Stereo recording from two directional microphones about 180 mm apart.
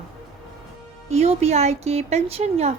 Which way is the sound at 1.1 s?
35° right (ahead or behind).